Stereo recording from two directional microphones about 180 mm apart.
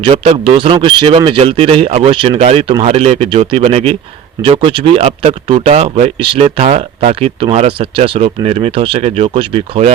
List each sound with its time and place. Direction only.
0.0 s speech: 30° right (ahead or behind)